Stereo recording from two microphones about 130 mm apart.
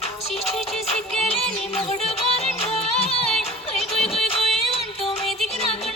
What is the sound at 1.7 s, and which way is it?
Music, 50° left (ahead or behind).